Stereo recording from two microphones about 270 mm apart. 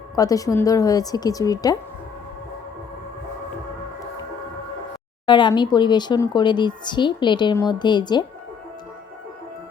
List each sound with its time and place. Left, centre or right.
0.2 s speech: centre
5.2 s speech: centre